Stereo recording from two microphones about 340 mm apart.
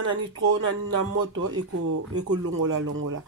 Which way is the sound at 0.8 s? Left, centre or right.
Right.